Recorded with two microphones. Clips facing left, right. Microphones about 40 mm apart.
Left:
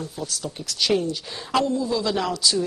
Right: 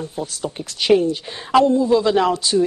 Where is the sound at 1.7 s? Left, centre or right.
Right.